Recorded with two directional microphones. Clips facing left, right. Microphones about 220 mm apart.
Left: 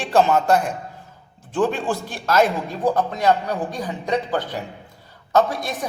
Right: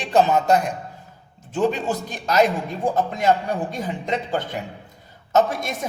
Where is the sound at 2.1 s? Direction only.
15° right (ahead or behind).